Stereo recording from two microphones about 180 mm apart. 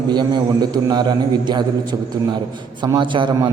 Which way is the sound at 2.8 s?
25° right (ahead or behind).